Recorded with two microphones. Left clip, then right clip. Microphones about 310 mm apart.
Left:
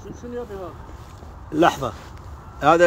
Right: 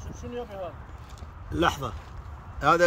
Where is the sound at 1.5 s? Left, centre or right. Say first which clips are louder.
Left 7 dB; centre.